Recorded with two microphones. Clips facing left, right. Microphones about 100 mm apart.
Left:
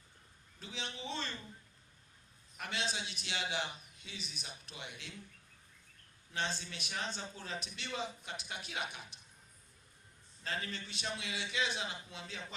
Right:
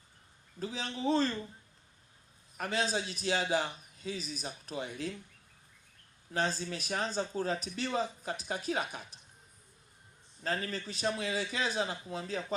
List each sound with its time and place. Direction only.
0.6 s a man's voice: 40° right (ahead or behind)
2.6 s a man's voice: 40° right (ahead or behind)
6.3 s a man's voice: 40° right (ahead or behind)
10.4 s a man's voice: 40° right (ahead or behind)